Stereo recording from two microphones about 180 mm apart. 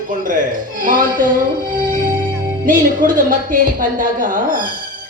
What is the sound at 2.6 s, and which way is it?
Speech, 50° right (ahead or behind).